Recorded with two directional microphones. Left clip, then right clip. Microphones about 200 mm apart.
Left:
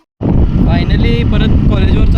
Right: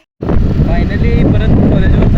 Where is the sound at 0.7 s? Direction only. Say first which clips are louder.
Left 2 dB; 15° left (ahead or behind).